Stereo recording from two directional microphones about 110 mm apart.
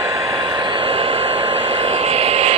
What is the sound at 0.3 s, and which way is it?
Vehicle, 40° right (ahead or behind).